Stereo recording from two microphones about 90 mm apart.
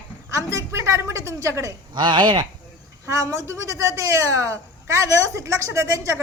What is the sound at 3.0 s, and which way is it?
A woman's voice, 35° right (ahead or behind).